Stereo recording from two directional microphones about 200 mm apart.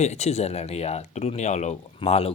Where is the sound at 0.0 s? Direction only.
35° left (ahead or behind).